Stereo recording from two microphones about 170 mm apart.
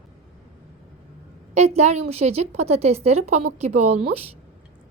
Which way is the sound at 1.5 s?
40° right (ahead or behind).